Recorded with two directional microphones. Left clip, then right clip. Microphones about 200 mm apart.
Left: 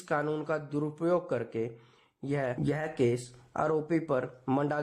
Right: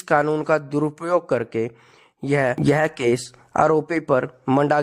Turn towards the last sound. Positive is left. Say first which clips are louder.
# right 12 dB
turn(degrees=-35)  # may be behind; listen again after turning